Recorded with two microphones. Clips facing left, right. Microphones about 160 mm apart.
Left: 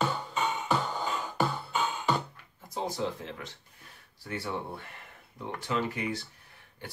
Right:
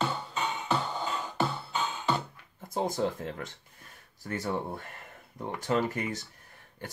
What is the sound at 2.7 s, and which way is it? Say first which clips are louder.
Speech: right 3 dB; 50° right (ahead or behind).